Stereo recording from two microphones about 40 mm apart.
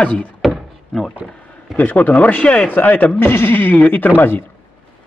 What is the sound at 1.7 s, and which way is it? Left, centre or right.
Speech, left.